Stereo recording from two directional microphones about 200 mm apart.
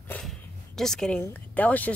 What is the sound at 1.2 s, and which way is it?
Speech, 10° left (ahead or behind).